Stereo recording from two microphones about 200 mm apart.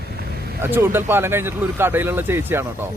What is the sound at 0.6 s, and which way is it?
Speech, 10° right (ahead or behind).